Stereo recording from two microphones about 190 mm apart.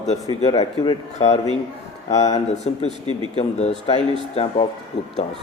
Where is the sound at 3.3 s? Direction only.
35° left (ahead or behind).